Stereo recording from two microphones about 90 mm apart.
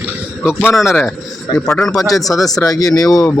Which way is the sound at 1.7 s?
10° left (ahead or behind).